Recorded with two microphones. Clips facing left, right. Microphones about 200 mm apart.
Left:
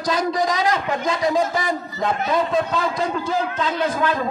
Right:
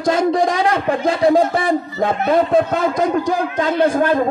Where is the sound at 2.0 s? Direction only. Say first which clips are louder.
Right 4 dB; 55° right (ahead or behind).